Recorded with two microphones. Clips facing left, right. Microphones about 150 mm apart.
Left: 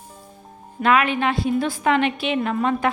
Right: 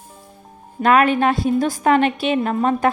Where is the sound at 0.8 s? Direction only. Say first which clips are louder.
Right 4 dB; 40° right (ahead or behind).